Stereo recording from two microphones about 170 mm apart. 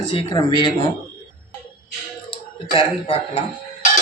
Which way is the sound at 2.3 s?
30° left (ahead or behind).